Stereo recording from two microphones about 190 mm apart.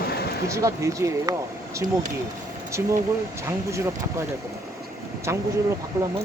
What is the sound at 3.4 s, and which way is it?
Speech, 15° right (ahead or behind).